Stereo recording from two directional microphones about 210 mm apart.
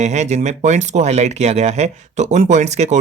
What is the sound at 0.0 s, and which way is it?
Speech, 30° right (ahead or behind).